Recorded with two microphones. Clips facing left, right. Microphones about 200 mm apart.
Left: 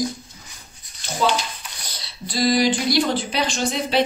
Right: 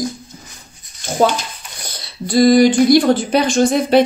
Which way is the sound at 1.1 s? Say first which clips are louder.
Right 6 dB; 50° right (ahead or behind).